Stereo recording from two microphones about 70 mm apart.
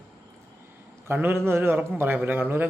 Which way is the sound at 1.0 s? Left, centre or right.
Right.